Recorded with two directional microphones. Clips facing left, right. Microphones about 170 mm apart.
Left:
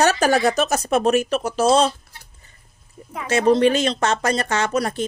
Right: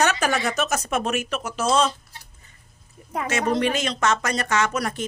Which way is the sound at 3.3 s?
30° left (ahead or behind).